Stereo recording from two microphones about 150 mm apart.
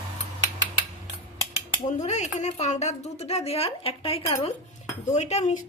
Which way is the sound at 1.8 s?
50° left (ahead or behind).